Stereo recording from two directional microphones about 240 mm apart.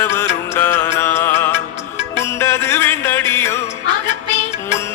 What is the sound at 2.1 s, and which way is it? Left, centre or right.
Music, centre.